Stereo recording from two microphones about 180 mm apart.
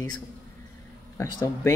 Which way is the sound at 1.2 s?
15° left (ahead or behind).